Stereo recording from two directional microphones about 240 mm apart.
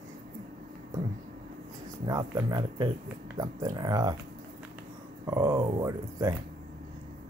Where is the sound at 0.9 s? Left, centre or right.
Centre.